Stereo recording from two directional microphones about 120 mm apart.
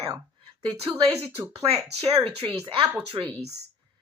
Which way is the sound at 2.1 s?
50° right (ahead or behind).